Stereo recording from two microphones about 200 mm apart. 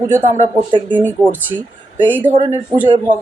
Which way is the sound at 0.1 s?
40° right (ahead or behind).